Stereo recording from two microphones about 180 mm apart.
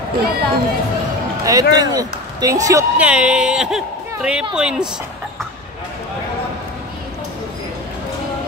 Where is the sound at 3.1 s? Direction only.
5° right (ahead or behind).